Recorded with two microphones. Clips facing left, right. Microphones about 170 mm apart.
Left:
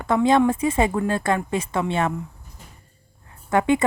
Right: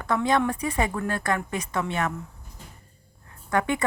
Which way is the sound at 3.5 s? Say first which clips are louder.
Left 6 dB; 25° left (ahead or behind).